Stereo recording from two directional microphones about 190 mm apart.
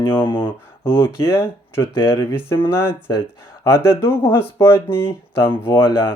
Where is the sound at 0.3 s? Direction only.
10° left (ahead or behind).